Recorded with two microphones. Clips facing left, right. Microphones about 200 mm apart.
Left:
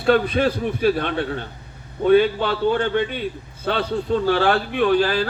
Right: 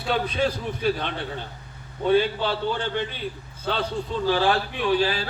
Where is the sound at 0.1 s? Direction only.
60° left (ahead or behind).